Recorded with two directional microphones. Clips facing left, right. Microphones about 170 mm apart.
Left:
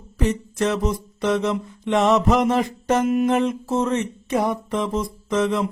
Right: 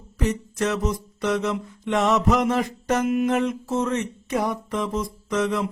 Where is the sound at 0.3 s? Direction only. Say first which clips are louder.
Left 2 dB; 30° left (ahead or behind).